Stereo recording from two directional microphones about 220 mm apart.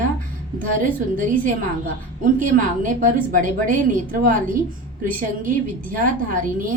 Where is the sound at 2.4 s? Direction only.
35° right (ahead or behind).